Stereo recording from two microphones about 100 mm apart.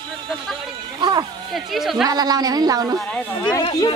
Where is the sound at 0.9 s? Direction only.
45° right (ahead or behind).